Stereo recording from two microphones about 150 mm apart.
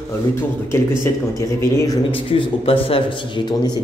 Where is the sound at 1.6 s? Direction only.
20° left (ahead or behind).